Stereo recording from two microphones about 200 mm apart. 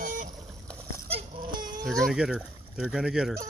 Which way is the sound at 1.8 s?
Centre (ahead or behind).